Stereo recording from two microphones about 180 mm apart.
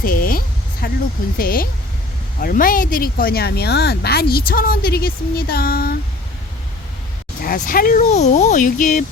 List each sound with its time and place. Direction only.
0.0 s a sound: 55° left (ahead or behind)
1.4 s speech: 55° left (ahead or behind)
7.4 s speech: 55° left (ahead or behind)